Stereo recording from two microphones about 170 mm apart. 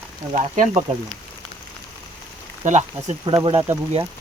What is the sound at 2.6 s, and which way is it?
Speech, 45° right (ahead or behind).